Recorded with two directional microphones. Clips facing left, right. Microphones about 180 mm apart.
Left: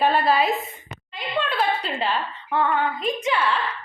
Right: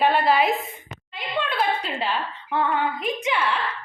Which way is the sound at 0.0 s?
15° right (ahead or behind).